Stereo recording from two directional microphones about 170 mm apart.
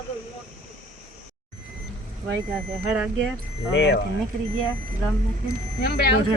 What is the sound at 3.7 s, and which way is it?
Speech, 75° left (ahead or behind).